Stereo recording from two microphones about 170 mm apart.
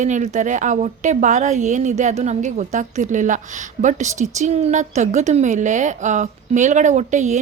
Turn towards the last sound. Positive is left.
turn(degrees=-45)  # may be behind; listen again after turning